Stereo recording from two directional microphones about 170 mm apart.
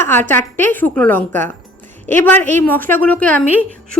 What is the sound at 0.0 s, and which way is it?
A woman's voice, 10° left (ahead or behind).